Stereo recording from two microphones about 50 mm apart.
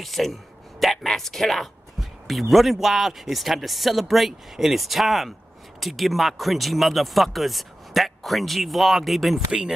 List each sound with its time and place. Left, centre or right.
0.0 s speech: centre
9.5 s speech: centre